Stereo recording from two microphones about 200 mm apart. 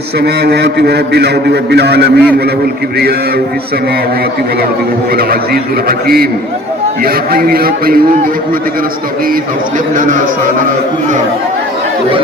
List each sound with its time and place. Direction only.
0.2 s a man's voice: 55° right (ahead or behind)
7.0 s a man's voice: 50° right (ahead or behind)